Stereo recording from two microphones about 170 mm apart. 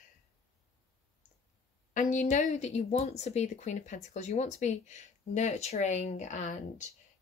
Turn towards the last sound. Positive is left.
turn(degrees=45)  # may be behind; listen again after turning